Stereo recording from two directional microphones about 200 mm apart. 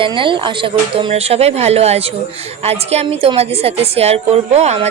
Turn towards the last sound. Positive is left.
turn(degrees=-35)  # may be behind; listen again after turning